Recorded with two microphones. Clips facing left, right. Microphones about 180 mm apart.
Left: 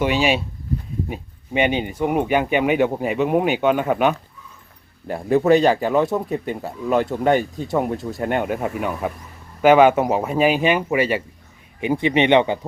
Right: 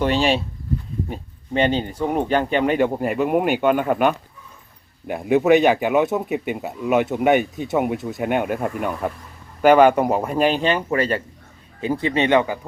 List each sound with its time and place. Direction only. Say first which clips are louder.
0.0 s speech: even; 5° left (ahead or behind)
5.5 s speech: even; 20° right (ahead or behind)
6.1 s speech: even; 5° right (ahead or behind)
6.9 s speech: right 1 dB; 20° right (ahead or behind)
7.7 s speech: even; 5° right (ahead or behind); by 12.5 s 20° left (ahead or behind)